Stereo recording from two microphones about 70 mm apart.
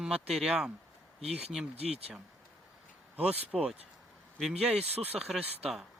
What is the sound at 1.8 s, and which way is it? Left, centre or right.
Speech, centre.